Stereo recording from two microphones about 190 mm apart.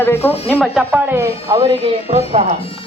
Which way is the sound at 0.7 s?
5° right (ahead or behind).